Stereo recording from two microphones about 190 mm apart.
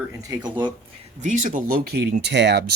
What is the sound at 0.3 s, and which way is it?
Speech, 25° right (ahead or behind).